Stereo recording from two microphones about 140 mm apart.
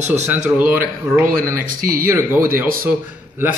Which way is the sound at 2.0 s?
15° right (ahead or behind).